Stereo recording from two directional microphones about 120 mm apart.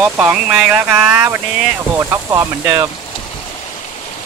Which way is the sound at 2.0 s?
25° right (ahead or behind).